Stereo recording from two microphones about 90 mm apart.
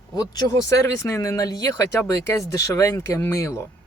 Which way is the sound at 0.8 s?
30° left (ahead or behind).